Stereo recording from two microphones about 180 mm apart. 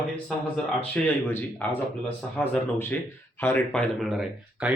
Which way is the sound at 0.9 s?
10° left (ahead or behind).